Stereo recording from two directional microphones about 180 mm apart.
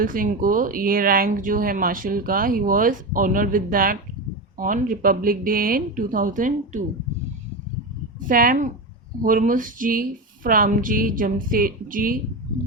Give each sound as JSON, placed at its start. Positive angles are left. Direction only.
{"t": 0.0, "sound": "speech", "side_deg": -50}
{"t": 8.3, "sound": "speech", "side_deg": -50}